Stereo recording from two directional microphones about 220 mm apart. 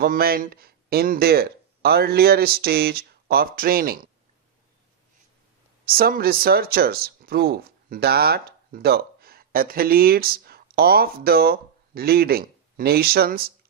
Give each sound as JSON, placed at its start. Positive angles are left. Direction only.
{"t": 0.0, "sound": "speech", "side_deg": -45}
{"t": 5.8, "sound": "speech", "side_deg": -40}